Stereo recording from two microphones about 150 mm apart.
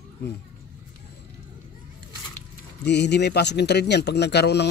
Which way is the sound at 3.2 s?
90° left.